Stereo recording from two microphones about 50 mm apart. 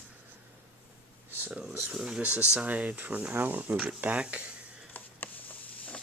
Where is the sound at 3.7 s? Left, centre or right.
Right.